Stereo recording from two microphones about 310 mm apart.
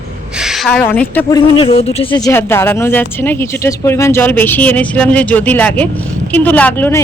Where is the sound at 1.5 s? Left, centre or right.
Centre.